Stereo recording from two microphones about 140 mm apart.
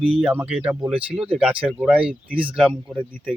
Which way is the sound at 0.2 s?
10° right (ahead or behind).